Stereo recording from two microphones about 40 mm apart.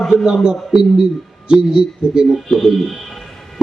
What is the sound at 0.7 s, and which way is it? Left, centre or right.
Speech, centre.